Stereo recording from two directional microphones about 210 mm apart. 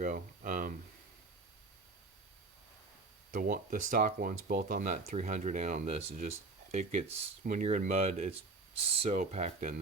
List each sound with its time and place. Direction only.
0.0 s speech: 40° right (ahead or behind)
3.3 s speech: 40° right (ahead or behind)